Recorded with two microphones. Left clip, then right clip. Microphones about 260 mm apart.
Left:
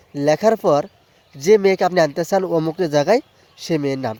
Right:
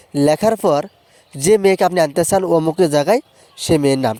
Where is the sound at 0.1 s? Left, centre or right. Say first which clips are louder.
Right 1 dB; right.